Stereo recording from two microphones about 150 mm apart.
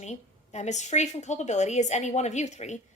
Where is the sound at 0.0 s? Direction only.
50° left (ahead or behind).